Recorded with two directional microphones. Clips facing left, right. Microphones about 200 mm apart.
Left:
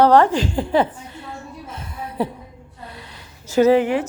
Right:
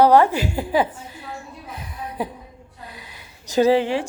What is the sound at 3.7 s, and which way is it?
Speech, 30° right (ahead or behind).